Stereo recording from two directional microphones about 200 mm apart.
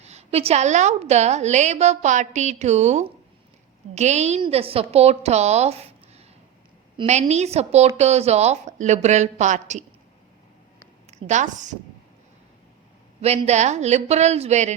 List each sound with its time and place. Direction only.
0.0 s a woman's voice: 35° right (ahead or behind)
11.1 s a woman's voice: 35° right (ahead or behind)
13.2 s a woman's voice: 30° right (ahead or behind)